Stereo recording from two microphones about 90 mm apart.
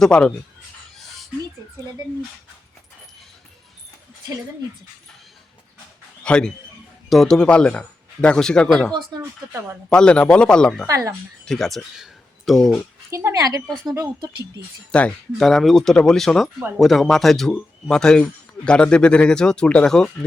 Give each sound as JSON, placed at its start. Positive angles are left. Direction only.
{"t": 0.0, "sound": "speech", "side_deg": 10}
{"t": 6.2, "sound": "a man's voice", "side_deg": 10}
{"t": 9.9, "sound": "speech", "side_deg": 10}
{"t": 10.8, "sound": "speech", "side_deg": -35}
{"t": 11.4, "sound": "speech", "side_deg": 5}
{"t": 13.1, "sound": "speech", "side_deg": -30}
{"t": 13.3, "sound": "speech", "side_deg": -45}
{"t": 13.7, "sound": "speech", "side_deg": 5}
{"t": 14.9, "sound": "speech", "side_deg": 10}